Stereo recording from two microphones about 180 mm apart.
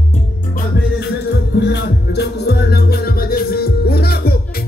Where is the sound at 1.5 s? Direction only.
70° left (ahead or behind).